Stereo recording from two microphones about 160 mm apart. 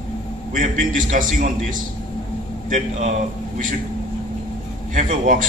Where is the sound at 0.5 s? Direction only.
55° right (ahead or behind).